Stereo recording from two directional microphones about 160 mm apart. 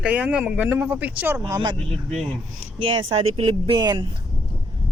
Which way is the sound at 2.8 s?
35° right (ahead or behind).